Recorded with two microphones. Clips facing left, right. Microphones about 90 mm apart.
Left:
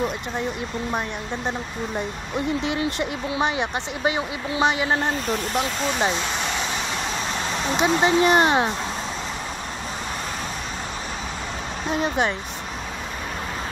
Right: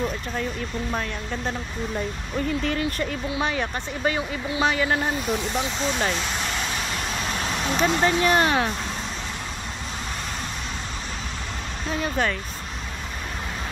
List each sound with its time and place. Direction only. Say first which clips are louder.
2.0 s speech: left 1 dB; 15° left (ahead or behind)
5.2 s speech: left 1 dB; centre (ahead or behind)
5.6 s speech: left 2 dB; 15° left (ahead or behind)
7.7 s speech: left 2 dB; 15° left (ahead or behind)
11.9 s speech: left 2 dB; 20° left (ahead or behind)